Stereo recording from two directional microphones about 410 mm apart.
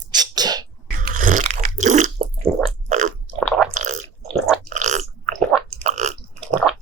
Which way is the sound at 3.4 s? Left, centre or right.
Centre.